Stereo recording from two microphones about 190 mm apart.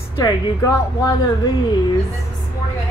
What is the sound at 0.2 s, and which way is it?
Speech, 20° left (ahead or behind).